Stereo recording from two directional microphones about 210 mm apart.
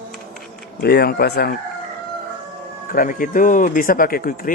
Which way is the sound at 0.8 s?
50° left (ahead or behind).